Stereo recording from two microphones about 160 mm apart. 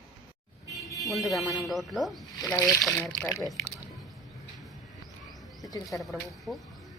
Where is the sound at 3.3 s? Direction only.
20° left (ahead or behind).